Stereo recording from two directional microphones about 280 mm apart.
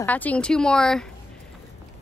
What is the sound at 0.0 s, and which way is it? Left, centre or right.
A woman's voice, centre.